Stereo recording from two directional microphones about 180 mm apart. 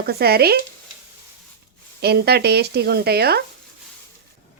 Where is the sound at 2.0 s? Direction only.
65° right (ahead or behind).